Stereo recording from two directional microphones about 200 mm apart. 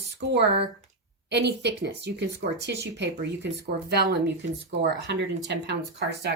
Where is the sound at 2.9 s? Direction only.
60° right (ahead or behind).